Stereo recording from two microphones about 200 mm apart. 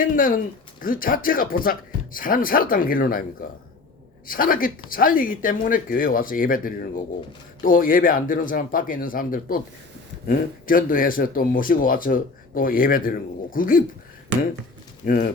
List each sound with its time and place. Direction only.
0.0 s speech: 45° left (ahead or behind)
4.3 s speech: 45° left (ahead or behind)
15.0 s speech: 40° left (ahead or behind)